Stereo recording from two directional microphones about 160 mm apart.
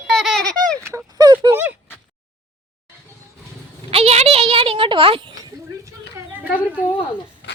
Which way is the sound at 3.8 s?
40° right (ahead or behind).